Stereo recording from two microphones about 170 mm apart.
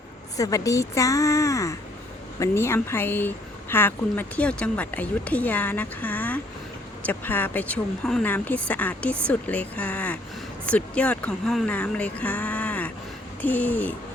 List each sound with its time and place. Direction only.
0.3 s a woman's voice: 20° left (ahead or behind)